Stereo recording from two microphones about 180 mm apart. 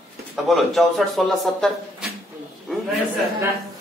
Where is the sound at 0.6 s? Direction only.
Centre (ahead or behind).